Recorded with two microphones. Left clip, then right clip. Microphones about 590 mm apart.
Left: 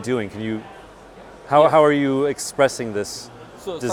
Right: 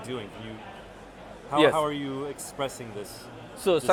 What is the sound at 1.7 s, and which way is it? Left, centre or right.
Speech, left.